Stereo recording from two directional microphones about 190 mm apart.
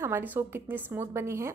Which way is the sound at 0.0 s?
10° right (ahead or behind).